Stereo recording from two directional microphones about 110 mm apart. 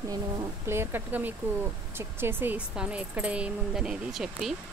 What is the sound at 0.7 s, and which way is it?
Speech, 20° right (ahead or behind).